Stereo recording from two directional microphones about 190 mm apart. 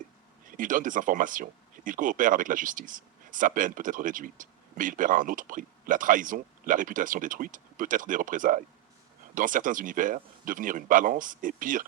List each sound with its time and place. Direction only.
0.5 s speech: 45° right (ahead or behind)